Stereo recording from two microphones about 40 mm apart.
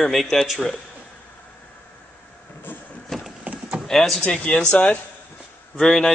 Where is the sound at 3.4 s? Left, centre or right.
Right.